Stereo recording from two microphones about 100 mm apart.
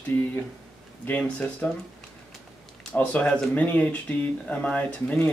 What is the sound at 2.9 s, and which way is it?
Speech, 15° left (ahead or behind).